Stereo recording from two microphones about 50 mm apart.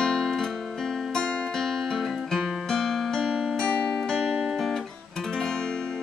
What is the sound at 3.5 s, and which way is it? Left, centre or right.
Music, centre.